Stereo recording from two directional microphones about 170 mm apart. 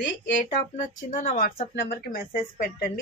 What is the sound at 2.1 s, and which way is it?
Speech, 65° left (ahead or behind).